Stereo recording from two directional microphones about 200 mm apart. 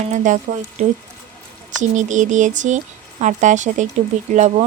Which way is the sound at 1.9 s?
40° right (ahead or behind).